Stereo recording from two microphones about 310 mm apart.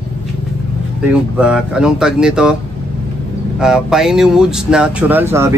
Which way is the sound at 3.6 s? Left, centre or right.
Centre.